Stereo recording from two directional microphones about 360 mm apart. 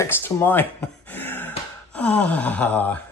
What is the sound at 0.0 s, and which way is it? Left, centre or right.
Speech, centre.